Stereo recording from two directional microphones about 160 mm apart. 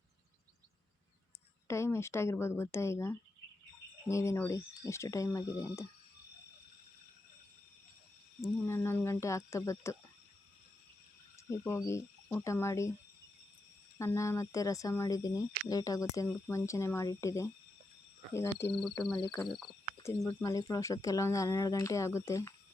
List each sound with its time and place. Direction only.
1.6 s speech: 15° left (ahead or behind)
8.4 s speech: 15° left (ahead or behind)
11.3 s speech: 15° left (ahead or behind)
14.0 s speech: 15° left (ahead or behind)
18.7 s speech: 5° left (ahead or behind)